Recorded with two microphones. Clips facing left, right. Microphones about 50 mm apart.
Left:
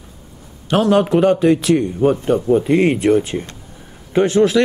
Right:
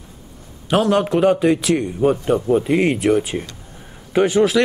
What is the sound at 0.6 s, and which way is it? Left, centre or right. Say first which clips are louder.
A man's voice: left 2 dB; centre.